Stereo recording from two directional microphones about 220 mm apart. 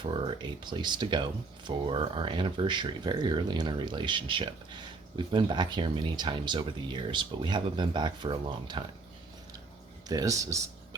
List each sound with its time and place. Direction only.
0.0 s speech: 20° right (ahead or behind)
10.1 s speech: 15° right (ahead or behind)